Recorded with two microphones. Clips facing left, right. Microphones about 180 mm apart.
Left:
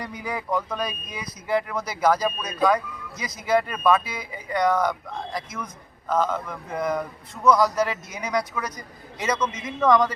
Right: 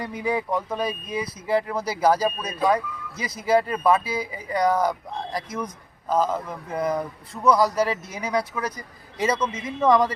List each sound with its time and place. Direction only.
0.0 s speech: 25° right (ahead or behind)